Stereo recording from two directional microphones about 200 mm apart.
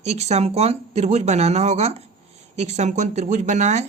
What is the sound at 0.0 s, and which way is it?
Speech, 35° right (ahead or behind).